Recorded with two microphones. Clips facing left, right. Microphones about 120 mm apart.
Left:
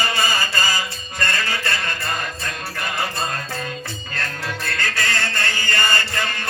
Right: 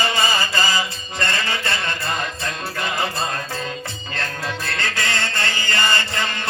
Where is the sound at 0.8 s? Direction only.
25° right (ahead or behind).